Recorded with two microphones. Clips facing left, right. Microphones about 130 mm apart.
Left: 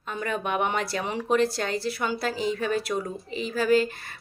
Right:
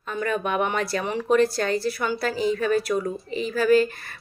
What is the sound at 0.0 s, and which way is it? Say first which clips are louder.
Speech: right 4 dB; 20° left (ahead or behind).